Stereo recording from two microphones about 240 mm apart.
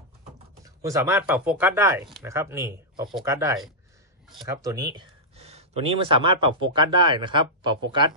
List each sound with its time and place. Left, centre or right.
0.8 s speech: centre